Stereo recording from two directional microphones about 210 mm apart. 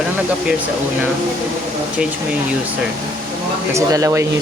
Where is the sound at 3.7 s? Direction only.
15° right (ahead or behind).